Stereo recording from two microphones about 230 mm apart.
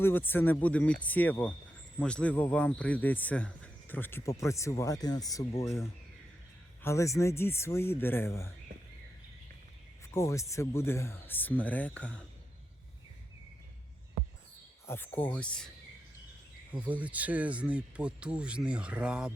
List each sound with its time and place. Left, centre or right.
0.0 s a man's voice: centre
6.8 s a man's voice: centre
10.2 s a man's voice: centre
14.8 s a man's voice: centre
16.7 s speech: centre